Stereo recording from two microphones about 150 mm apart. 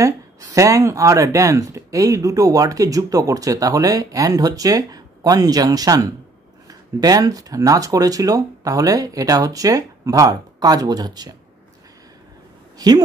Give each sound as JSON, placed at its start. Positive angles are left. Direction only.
{"t": 0.0, "sound": "speech", "side_deg": -20}
{"t": 12.7, "sound": "speech", "side_deg": -25}